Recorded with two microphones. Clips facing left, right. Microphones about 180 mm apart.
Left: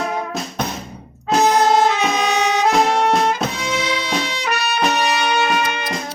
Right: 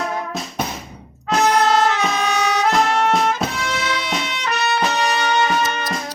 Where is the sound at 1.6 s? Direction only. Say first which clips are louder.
Left 2 dB; 15° left (ahead or behind).